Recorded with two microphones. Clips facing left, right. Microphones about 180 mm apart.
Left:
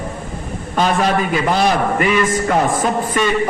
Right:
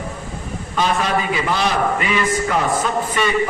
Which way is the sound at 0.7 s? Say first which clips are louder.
Left 3 dB; 50° left (ahead or behind).